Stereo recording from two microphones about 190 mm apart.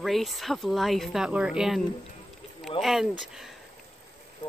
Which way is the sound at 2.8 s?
Centre (ahead or behind).